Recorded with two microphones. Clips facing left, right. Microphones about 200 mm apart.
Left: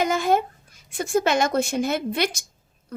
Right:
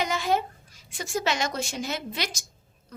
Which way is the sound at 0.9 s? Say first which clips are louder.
Left 7 dB; 55° left (ahead or behind).